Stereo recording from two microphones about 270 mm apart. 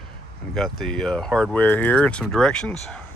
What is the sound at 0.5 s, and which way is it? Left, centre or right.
Speech, centre.